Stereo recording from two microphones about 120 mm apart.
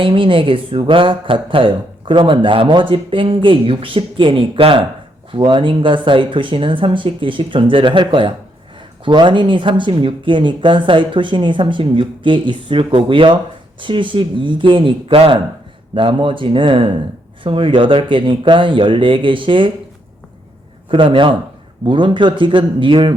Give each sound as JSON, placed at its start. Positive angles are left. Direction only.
{"t": 0.0, "sound": "speech", "side_deg": -45}
{"t": 20.9, "sound": "speech", "side_deg": -45}